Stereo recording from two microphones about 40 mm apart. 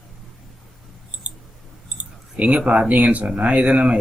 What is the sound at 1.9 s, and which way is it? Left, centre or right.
Clicking, right.